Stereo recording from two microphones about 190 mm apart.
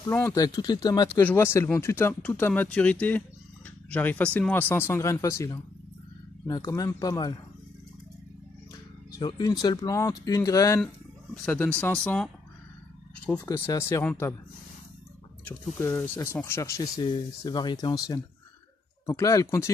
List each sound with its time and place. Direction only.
0.0 s speech: 10° left (ahead or behind)
9.2 s speech: 20° left (ahead or behind)
13.5 s speech: 15° left (ahead or behind)
15.4 s speech: 10° left (ahead or behind)